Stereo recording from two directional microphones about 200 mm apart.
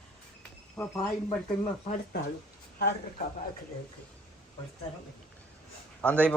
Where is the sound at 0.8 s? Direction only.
15° left (ahead or behind).